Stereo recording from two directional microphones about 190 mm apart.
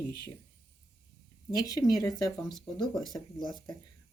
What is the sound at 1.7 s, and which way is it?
Speech, 20° left (ahead or behind).